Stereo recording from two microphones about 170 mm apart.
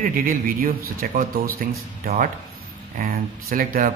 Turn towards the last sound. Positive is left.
turn(degrees=-55)  # may be behind; listen again after turning